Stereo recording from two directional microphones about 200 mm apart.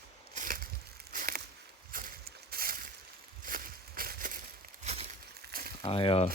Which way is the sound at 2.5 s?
45° right (ahead or behind).